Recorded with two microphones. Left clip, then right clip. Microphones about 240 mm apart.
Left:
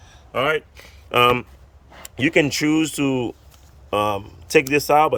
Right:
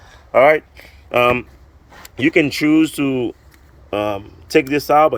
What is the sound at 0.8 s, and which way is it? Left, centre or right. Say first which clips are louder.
Speech: right 1 dB; centre.